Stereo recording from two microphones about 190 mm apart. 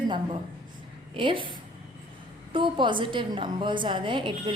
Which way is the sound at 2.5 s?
25° right (ahead or behind).